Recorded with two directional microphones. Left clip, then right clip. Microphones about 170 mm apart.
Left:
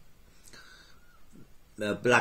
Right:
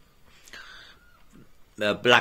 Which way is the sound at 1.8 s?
20° left (ahead or behind).